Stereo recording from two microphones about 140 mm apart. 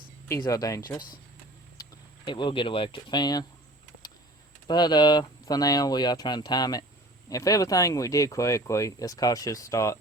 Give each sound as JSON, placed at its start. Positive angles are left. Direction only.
{"t": 0.3, "sound": "speech", "side_deg": 25}
{"t": 1.8, "sound": "speech", "side_deg": 35}
{"t": 4.7, "sound": "speech", "side_deg": 30}